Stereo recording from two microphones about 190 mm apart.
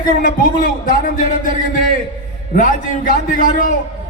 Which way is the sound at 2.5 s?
45° left (ahead or behind).